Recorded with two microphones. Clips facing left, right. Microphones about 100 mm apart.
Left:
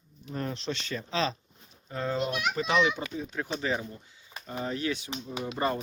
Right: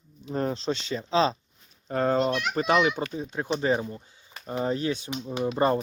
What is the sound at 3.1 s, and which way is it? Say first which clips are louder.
Speech: right 4 dB; 25° right (ahead or behind).